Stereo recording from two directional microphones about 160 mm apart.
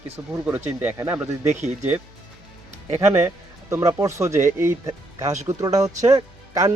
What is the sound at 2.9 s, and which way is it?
Speech, 15° right (ahead or behind).